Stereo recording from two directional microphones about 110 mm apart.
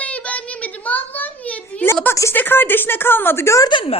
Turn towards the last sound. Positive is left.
turn(degrees=30)  # may be behind; listen again after turning